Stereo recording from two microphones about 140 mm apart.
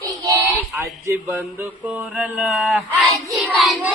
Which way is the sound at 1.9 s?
10° right (ahead or behind).